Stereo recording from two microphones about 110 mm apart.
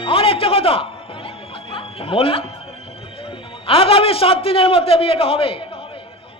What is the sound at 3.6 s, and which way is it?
A man's voice, 60° left (ahead or behind).